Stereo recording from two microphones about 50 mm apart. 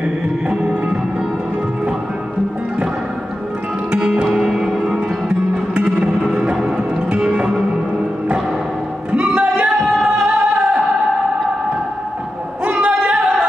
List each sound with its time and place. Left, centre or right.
0.5 s music: right
3.9 s music: centre
9.1 s music: right
9.8 s music: centre
10.0 s music: centre
12.6 s music: right